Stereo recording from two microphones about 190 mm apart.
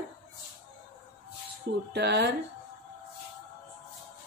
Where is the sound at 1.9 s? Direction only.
60° right (ahead or behind).